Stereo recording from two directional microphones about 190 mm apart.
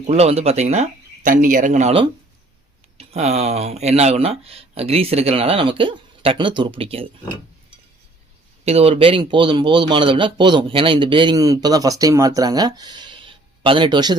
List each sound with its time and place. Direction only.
0.1 s speech: 35° right (ahead or behind)
8.6 s speech: 30° right (ahead or behind)